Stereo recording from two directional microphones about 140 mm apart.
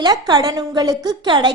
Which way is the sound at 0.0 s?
30° right (ahead or behind).